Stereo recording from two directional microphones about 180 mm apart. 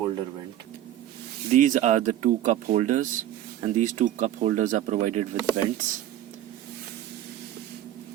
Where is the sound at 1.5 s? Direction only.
45° right (ahead or behind).